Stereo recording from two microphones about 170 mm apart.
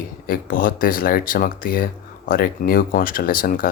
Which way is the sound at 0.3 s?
55° left (ahead or behind).